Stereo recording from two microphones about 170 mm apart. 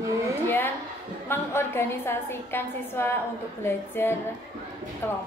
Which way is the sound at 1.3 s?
15° left (ahead or behind).